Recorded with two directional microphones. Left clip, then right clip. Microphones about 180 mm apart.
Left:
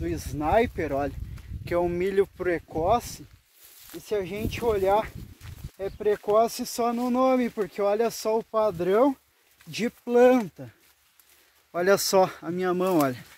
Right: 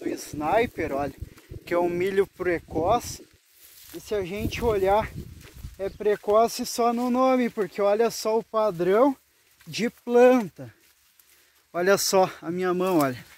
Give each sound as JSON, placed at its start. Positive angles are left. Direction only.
{"t": 0.0, "sound": "speech", "side_deg": -15}
{"t": 11.7, "sound": "speech", "side_deg": -25}